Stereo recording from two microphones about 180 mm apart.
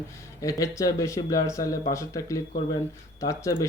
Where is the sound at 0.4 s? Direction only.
15° left (ahead or behind).